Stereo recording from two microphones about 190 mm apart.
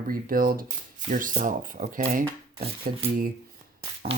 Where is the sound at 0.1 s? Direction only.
50° right (ahead or behind).